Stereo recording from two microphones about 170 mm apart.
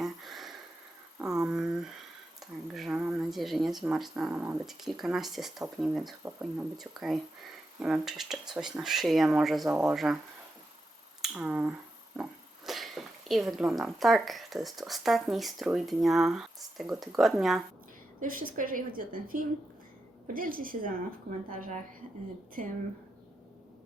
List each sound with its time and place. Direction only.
0.0 s a sound: centre (ahead or behind)
3.0 s speech: 5° right (ahead or behind)
11.2 s speech: 5° right (ahead or behind)
18.2 s a woman's voice: 55° right (ahead or behind)